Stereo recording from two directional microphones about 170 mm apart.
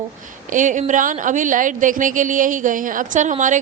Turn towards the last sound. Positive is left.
turn(degrees=-45)  # may be behind; listen again after turning